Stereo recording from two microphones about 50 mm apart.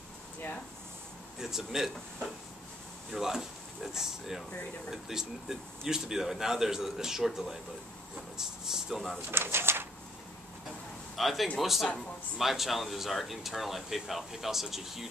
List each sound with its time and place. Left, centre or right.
1.4 s speech: centre
3.1 s speech: centre
9.3 s speech: right
11.1 s speech: centre